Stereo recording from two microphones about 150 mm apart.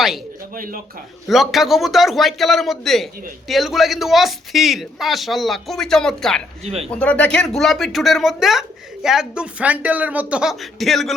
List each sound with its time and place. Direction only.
0.5 s speech: 65° right (ahead or behind)
1.3 s speech: centre (ahead or behind)